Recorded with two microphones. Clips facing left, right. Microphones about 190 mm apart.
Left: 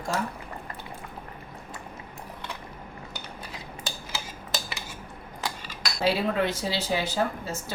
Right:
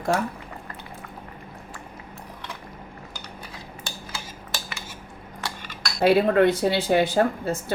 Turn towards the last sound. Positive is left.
turn(degrees=-55)  # may be behind; listen again after turning